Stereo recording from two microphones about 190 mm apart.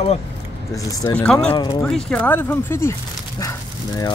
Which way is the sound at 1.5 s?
20° left (ahead or behind).